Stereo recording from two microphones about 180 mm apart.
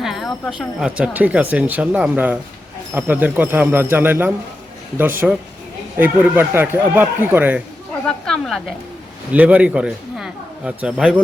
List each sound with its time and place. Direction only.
0.0 s speech: centre (ahead or behind)
8.0 s speech: 5° left (ahead or behind)